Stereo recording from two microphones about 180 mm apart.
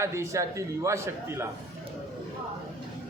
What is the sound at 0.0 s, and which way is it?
A man's voice, 15° right (ahead or behind).